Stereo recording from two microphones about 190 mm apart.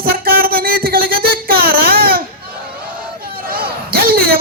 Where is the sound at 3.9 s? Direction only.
50° right (ahead or behind).